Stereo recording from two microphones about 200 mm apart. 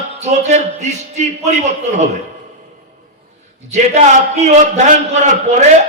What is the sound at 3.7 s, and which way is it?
A man's voice, 35° right (ahead or behind).